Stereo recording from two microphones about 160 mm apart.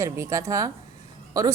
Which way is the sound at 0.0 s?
20° right (ahead or behind).